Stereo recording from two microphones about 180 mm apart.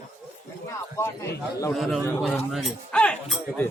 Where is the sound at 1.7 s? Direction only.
Centre (ahead or behind).